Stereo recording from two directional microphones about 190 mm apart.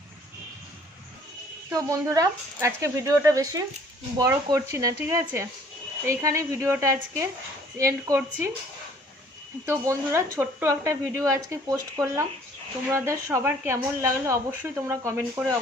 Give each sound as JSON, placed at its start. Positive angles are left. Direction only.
{"t": 1.7, "sound": "a woman's voice", "side_deg": -15}
{"t": 9.6, "sound": "a woman's voice", "side_deg": -15}